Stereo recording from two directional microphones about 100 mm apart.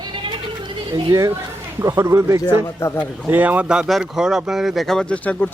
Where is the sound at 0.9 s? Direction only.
35° right (ahead or behind).